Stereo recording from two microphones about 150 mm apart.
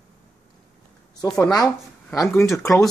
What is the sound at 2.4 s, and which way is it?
Speech, 20° left (ahead or behind).